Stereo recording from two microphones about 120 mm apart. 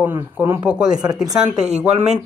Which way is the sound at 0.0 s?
15° right (ahead or behind).